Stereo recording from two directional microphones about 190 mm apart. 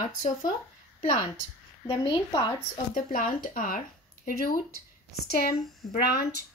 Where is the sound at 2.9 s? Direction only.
45° left (ahead or behind).